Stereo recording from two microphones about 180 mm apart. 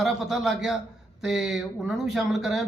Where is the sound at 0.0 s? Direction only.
Centre (ahead or behind).